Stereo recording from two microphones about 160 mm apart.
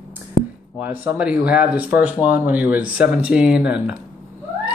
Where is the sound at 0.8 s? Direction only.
10° right (ahead or behind).